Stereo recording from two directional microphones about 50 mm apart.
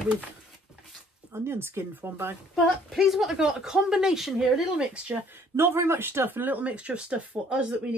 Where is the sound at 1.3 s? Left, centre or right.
Right.